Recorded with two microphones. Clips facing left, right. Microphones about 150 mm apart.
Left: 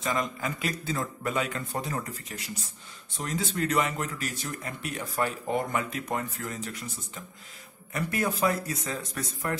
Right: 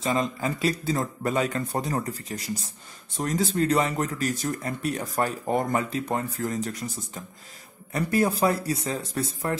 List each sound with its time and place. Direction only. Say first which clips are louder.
0.0 s speech: right 4 dB; 30° right (ahead or behind)
7.9 s speech: right 6 dB; 35° right (ahead or behind)